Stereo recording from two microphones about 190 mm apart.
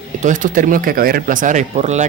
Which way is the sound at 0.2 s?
40° right (ahead or behind).